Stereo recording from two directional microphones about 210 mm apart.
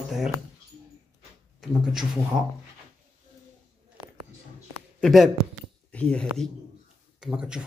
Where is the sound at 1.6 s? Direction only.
Centre (ahead or behind).